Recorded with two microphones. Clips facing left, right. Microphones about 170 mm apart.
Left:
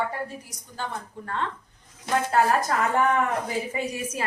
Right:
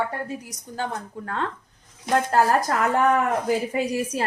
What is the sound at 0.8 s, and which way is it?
Speech, 45° right (ahead or behind).